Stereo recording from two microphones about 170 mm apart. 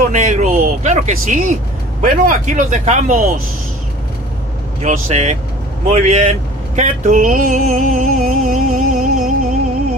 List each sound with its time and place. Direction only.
0.1 s speech: 45° right (ahead or behind)
4.8 s speech: 45° right (ahead or behind)